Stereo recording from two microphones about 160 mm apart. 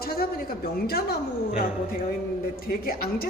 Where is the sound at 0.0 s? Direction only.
70° left (ahead or behind).